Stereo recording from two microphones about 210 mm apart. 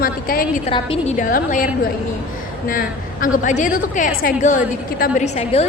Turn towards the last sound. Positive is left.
turn(degrees=30)  # may be behind; listen again after turning